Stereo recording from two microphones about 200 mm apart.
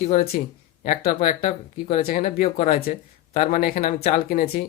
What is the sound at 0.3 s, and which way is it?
Speech, 45° left (ahead or behind).